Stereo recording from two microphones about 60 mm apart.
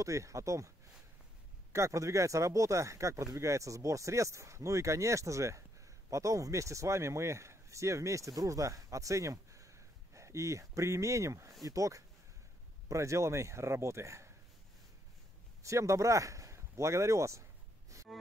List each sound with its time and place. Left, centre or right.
0.0 s speech: right
1.7 s speech: right
11.6 s speech: right
15.6 s speech: right
17.9 s snort: right